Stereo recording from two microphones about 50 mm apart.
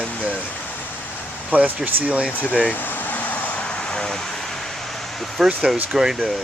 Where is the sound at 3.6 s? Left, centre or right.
Centre.